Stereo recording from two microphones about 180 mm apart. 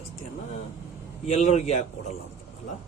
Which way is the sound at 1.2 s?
35° left (ahead or behind).